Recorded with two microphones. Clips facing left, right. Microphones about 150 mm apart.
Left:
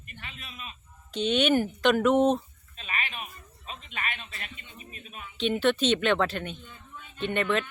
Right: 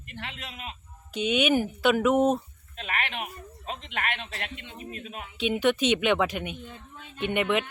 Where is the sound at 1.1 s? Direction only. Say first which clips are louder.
Even; 10° right (ahead or behind).